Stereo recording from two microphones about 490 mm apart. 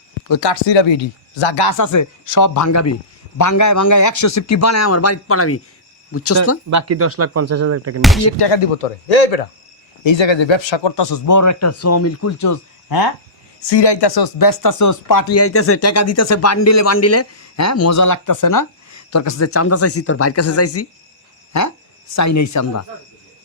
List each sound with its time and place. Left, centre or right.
0.3 s speech: left
1.8 s speech: left
6.7 s speech: right
8.4 s speech: left
10.0 s speech: left
13.6 s speech: left